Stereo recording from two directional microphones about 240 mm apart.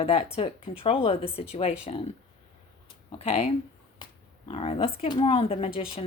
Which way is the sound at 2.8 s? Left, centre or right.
Left.